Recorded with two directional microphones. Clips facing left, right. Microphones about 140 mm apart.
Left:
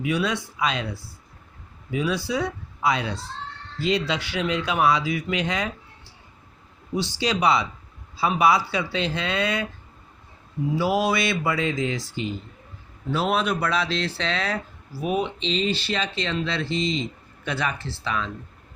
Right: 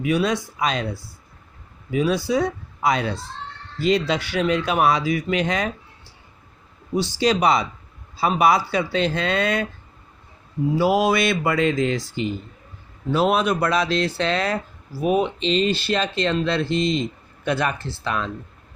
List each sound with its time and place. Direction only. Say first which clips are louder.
0.0 s speech: right 4 dB; 45° right (ahead or behind)
1.9 s speech: right 5 dB; 45° right (ahead or behind)
6.9 s speech: right 5 dB; 45° right (ahead or behind)
10.8 s speech: right 4 dB; 45° right (ahead or behind)
13.1 s speech: right 4 dB; 45° right (ahead or behind)